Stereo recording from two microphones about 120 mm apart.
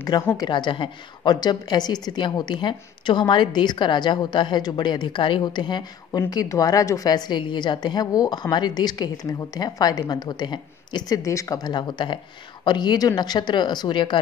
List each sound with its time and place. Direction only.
0.4 s a woman's voice: 40° left (ahead or behind)